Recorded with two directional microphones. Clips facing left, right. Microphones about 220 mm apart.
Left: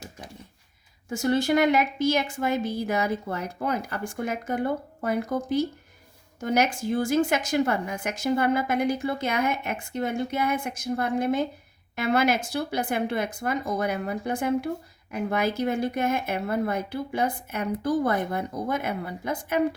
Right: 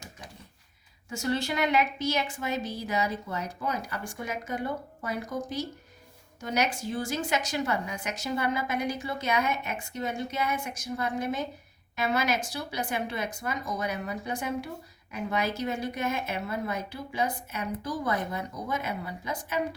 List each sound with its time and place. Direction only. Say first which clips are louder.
1.1 s a woman's voice: left 7 dB; 50° left (ahead or behind)